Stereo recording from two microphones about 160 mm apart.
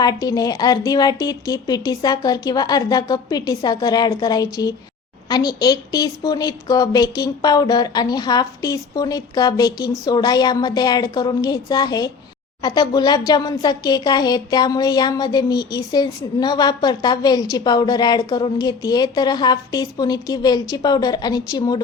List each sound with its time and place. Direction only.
0.0 s a woman's voice: 25° left (ahead or behind)